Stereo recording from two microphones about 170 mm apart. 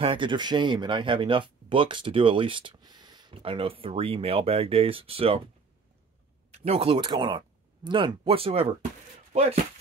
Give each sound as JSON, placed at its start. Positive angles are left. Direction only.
{"t": 0.0, "sound": "speech", "side_deg": -30}
{"t": 6.6, "sound": "speech", "side_deg": -35}